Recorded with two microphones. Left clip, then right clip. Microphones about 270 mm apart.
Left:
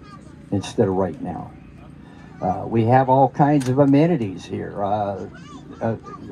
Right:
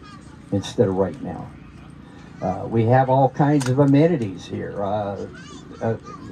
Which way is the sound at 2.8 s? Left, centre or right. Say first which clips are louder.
Left 1 dB; left.